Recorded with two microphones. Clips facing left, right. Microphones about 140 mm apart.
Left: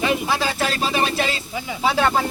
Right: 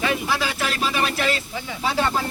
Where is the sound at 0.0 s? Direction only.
20° left (ahead or behind).